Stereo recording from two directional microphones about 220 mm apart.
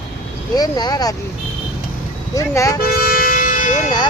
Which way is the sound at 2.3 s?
15° left (ahead or behind).